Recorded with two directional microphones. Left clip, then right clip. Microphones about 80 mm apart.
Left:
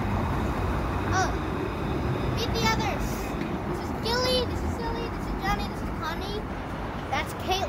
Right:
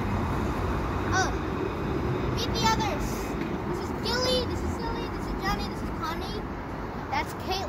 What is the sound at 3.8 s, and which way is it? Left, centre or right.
Vehicle, centre.